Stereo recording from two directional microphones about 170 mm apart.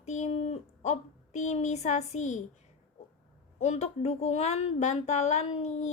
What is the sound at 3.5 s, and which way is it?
A woman's voice, 40° left (ahead or behind).